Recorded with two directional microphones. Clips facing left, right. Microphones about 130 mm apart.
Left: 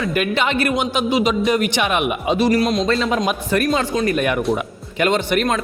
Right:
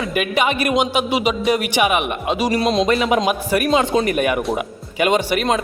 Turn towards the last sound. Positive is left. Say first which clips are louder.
# even
turn(degrees=-10)  # may be behind; listen again after turning